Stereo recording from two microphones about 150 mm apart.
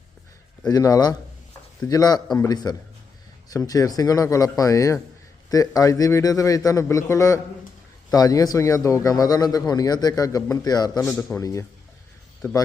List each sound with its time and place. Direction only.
0.6 s a man's voice: 25° left (ahead or behind)
11.1 s a man's voice: 5° left (ahead or behind)
11.3 s a man's voice: 20° left (ahead or behind)